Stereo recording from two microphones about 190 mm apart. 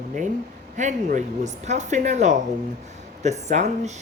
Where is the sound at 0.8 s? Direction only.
40° right (ahead or behind).